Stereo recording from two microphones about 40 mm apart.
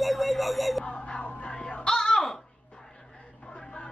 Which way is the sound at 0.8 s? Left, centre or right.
Left.